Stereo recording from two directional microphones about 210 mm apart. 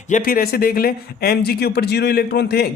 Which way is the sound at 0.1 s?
45° left (ahead or behind).